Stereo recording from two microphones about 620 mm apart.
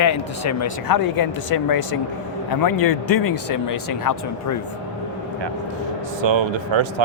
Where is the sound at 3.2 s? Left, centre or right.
Left.